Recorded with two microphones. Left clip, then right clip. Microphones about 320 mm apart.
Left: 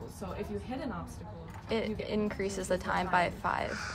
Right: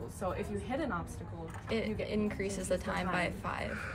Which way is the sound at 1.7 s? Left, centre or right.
Left.